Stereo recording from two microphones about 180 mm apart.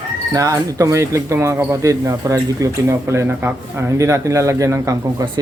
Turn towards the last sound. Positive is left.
turn(degrees=-15)  # may be behind; listen again after turning